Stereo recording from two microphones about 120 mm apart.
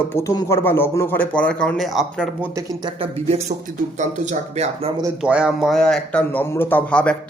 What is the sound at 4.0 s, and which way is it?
Speech, 80° right.